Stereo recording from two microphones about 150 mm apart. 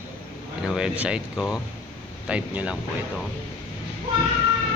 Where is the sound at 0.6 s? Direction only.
5° right (ahead or behind).